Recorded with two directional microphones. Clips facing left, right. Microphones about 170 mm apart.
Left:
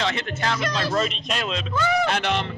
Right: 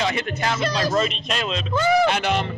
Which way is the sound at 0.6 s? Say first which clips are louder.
Right 3 dB; 35° right (ahead or behind).